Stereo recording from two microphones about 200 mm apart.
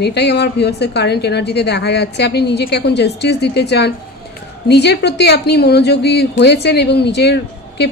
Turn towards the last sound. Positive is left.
turn(degrees=55)  # may be behind; listen again after turning